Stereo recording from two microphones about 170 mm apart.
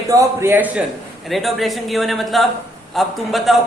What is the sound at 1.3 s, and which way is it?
Speech, centre (ahead or behind).